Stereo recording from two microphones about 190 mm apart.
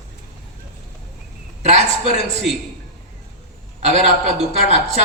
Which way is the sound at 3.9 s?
35° right (ahead or behind).